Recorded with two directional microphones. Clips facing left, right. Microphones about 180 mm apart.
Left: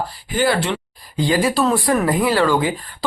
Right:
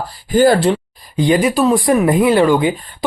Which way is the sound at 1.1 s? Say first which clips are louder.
Right 4 dB; 20° right (ahead or behind).